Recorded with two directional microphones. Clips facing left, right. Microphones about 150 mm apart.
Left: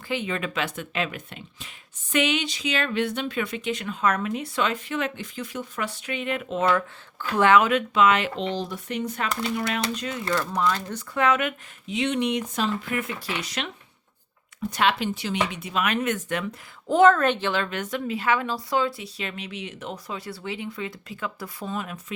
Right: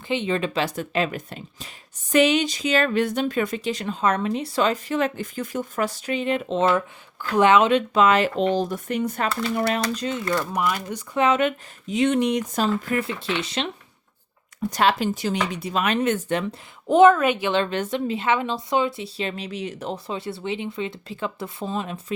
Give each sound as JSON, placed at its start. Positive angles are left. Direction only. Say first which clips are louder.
{"t": 0.1, "sound": "speech", "louder": "right 4 dB", "side_deg": -25}
{"t": 10.2, "sound": "speech", "louder": "left 1 dB", "side_deg": -20}
{"t": 11.9, "sound": "speech", "louder": "right 4 dB", "side_deg": -45}
{"t": 14.7, "sound": "speech", "louder": "right 3 dB", "side_deg": -40}
{"t": 17.0, "sound": "speech", "louder": "right 3 dB", "side_deg": -10}
{"t": 17.5, "sound": "speech", "louder": "right 5 dB", "side_deg": -30}